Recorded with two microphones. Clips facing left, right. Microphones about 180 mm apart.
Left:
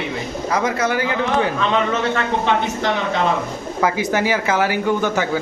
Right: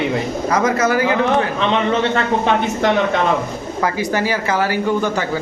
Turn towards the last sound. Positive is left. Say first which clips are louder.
# even
turn(degrees=15)  # may be behind; listen again after turning